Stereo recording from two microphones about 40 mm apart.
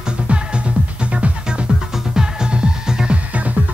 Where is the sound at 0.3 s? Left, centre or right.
Right.